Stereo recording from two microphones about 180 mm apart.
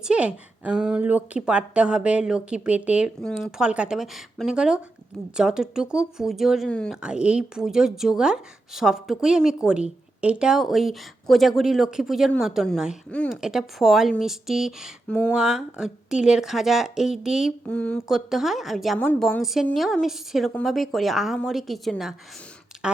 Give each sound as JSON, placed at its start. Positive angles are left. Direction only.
{"t": 0.0, "sound": "speech", "side_deg": -5}